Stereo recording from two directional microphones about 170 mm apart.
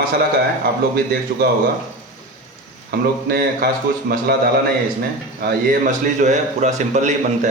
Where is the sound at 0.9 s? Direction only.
60° right (ahead or behind).